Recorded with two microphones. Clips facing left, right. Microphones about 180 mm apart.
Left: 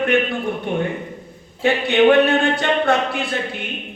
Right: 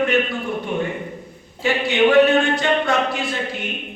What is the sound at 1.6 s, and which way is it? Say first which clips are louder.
Speech: left 3 dB; 60° left (ahead or behind).